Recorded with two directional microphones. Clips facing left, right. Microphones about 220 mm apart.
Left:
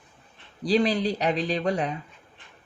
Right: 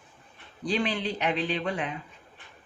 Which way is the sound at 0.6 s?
35° left (ahead or behind).